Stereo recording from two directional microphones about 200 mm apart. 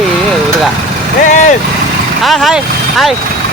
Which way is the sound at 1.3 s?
40° left (ahead or behind).